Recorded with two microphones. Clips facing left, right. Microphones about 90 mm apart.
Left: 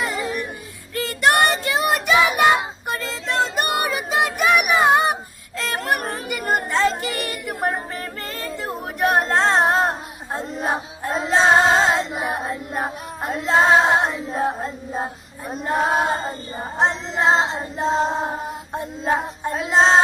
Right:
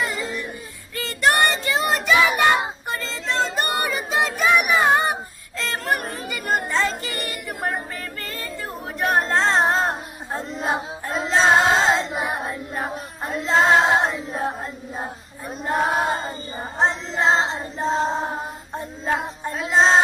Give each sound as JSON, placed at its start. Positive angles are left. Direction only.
{"t": 0.9, "sound": "child singing", "side_deg": 15}
{"t": 6.2, "sound": "a sound", "side_deg": 15}
{"t": 8.4, "sound": "singing", "side_deg": 15}
{"t": 12.4, "sound": "female singing", "side_deg": 15}